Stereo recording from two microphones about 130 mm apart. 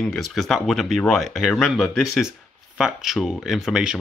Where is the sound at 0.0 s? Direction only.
5° left (ahead or behind).